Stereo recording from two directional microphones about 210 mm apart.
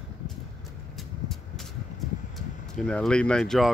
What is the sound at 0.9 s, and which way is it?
Vehicle, centre (ahead or behind).